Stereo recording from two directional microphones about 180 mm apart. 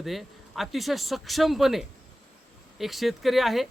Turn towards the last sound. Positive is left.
turn(degrees=0)  # may be behind; listen again after turning